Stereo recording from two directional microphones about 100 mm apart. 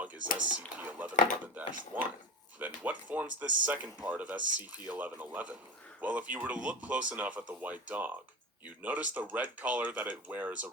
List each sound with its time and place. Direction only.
0.0 s speech: 15° right (ahead or behind)